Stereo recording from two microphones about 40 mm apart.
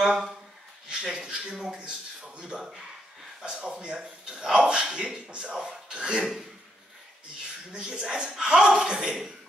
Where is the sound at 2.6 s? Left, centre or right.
Centre.